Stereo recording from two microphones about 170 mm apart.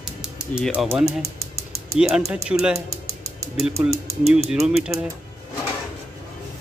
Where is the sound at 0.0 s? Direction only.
5° right (ahead or behind).